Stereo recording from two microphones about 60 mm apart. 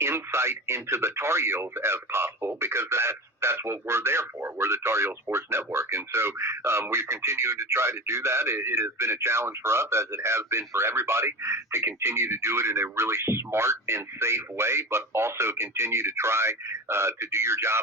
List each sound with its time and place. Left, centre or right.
0.0 s speech: right